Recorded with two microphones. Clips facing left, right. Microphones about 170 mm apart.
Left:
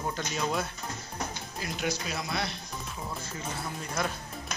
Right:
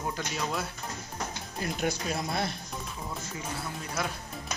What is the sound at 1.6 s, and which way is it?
Speech, 50° right (ahead or behind).